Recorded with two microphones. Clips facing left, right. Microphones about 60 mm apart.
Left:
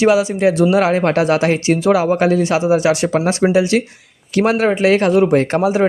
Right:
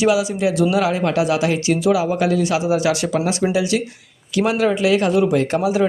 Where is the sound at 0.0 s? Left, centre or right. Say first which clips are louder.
Left 4 dB; left.